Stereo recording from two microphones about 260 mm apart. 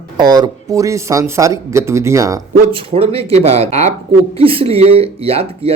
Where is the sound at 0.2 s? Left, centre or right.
Centre.